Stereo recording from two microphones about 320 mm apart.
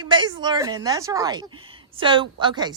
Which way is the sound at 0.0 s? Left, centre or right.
Centre.